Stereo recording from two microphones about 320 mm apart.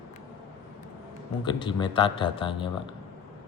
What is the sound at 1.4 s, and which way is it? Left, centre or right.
A man's voice, centre.